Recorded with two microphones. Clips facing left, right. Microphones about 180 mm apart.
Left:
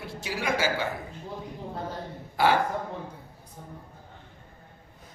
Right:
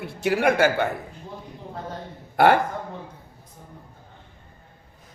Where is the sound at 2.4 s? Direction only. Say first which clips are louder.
Right 6 dB; 60° right (ahead or behind).